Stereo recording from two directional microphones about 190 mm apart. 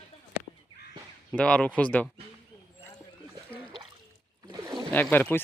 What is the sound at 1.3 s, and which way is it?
Speech, 5° left (ahead or behind).